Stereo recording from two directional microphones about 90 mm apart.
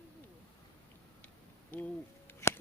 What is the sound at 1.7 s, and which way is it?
Hoot, 20° left (ahead or behind).